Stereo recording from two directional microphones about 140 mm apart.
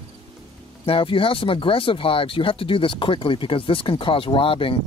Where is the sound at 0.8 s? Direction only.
40° left (ahead or behind).